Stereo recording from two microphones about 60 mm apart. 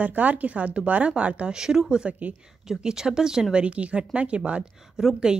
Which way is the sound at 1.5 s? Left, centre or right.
Centre.